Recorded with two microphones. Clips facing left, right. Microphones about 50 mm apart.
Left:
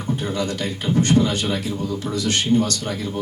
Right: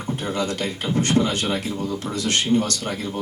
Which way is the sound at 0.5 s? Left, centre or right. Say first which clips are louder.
Left 2 dB; right.